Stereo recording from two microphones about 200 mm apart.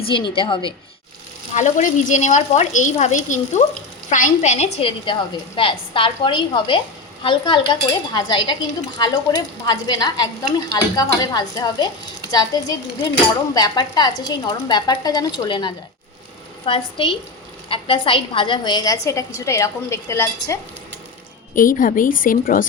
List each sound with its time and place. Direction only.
0.1 s speech: 25° left (ahead or behind)
1.5 s a woman's voice: 40° left (ahead or behind); by 20.6 s 15° left (ahead or behind)
21.5 s a woman's voice: 40° left (ahead or behind)